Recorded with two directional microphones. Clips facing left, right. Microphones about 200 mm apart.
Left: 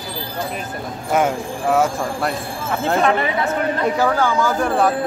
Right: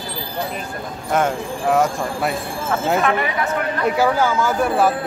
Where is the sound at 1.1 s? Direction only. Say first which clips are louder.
Left 1 dB; 5° left (ahead or behind).